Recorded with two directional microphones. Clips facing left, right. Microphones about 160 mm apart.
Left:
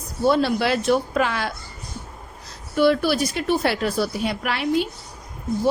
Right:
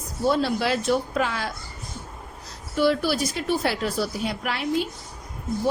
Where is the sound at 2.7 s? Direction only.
65° left (ahead or behind).